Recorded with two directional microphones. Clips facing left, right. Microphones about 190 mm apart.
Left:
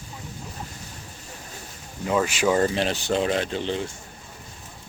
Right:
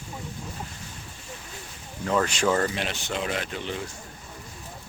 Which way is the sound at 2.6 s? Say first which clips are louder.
Left 5 dB; 35° left (ahead or behind).